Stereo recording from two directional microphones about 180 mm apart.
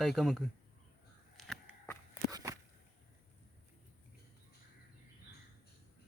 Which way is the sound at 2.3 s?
20° right (ahead or behind).